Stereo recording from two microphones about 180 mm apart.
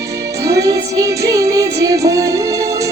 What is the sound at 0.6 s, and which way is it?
Music, 20° right (ahead or behind).